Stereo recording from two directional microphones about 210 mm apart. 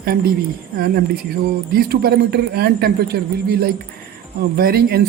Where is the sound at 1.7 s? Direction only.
45° right (ahead or behind).